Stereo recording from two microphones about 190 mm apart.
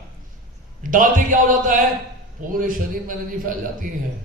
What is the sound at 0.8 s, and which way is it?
A man's voice, 45° right (ahead or behind).